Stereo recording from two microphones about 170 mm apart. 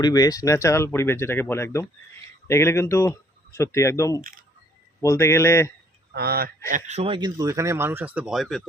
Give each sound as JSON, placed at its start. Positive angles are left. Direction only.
{"t": 0.0, "sound": "speech", "side_deg": 20}
{"t": 4.2, "sound": "speech", "side_deg": -55}
{"t": 5.0, "sound": "speech", "side_deg": 15}
{"t": 6.1, "sound": "speech", "side_deg": -65}
{"t": 6.7, "sound": "speech", "side_deg": -45}